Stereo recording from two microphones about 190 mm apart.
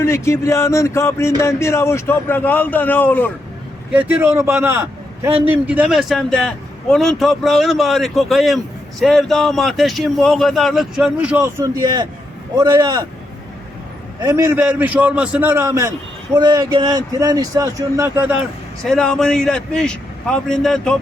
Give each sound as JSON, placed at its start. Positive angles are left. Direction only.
{"t": 0.0, "sound": "a man's voice", "side_deg": 15}
{"t": 3.9, "sound": "a man's voice", "side_deg": -10}
{"t": 14.2, "sound": "a man's voice", "side_deg": -15}
{"t": 18.3, "sound": "speech", "side_deg": 5}